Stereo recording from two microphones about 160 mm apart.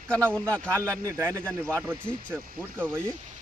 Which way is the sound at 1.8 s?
15° right (ahead or behind).